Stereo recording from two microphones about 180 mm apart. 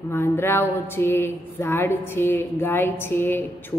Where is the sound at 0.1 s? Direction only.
15° left (ahead or behind).